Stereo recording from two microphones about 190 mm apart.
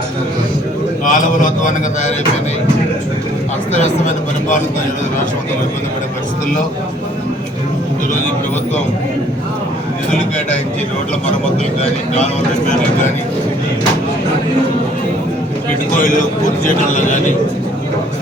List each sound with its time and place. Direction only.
1.0 s a man's voice: 45° left (ahead or behind)